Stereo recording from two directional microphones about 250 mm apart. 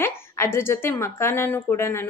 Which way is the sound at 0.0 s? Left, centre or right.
Centre.